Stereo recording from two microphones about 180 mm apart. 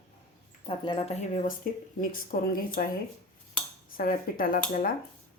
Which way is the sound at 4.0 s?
50° left (ahead or behind).